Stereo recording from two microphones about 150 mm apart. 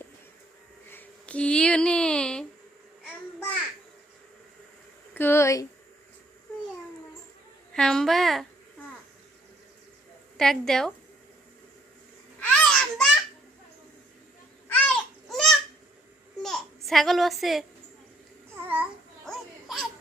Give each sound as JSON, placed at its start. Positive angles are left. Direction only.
{"t": 0.9, "sound": "a sound", "side_deg": 10}
{"t": 5.1, "sound": "speech", "side_deg": 15}
{"t": 7.7, "sound": "a woman's voice", "side_deg": 5}
{"t": 10.3, "sound": "a woman's voice", "side_deg": 5}
{"t": 12.4, "sound": "babbling", "side_deg": 5}
{"t": 14.7, "sound": "a sound", "side_deg": 10}
{"t": 16.4, "sound": "babbling", "side_deg": 5}
{"t": 18.5, "sound": "babbling", "side_deg": -10}
{"t": 19.2, "sound": "a sound", "side_deg": 0}